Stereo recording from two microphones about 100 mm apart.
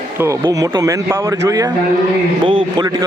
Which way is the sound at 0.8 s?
30° right (ahead or behind).